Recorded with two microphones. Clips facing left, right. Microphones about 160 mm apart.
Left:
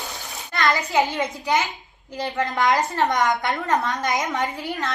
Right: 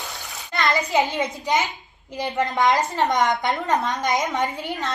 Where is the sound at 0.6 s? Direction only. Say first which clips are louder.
Even; 20° right (ahead or behind).